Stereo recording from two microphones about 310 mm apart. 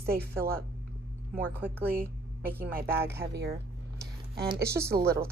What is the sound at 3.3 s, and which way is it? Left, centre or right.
Speech, right.